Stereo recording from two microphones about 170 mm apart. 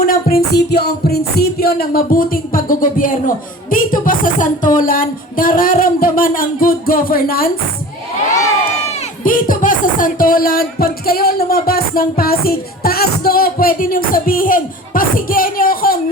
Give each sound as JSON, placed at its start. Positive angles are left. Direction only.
{"t": 0.0, "sound": "music", "side_deg": 55}
{"t": 0.5, "sound": "music", "side_deg": 70}
{"t": 9.2, "sound": "music", "side_deg": 55}